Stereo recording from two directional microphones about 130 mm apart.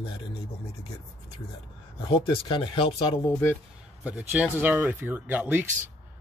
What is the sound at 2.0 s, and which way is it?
Speech, 40° left (ahead or behind).